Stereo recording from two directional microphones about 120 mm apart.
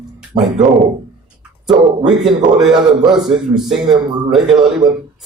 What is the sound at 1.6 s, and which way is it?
Speech, 5° right (ahead or behind).